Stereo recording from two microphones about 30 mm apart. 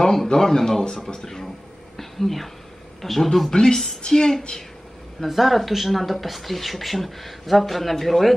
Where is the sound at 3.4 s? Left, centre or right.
Left.